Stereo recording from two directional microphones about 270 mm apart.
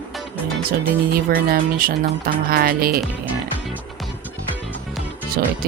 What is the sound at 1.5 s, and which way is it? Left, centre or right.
Speech, right.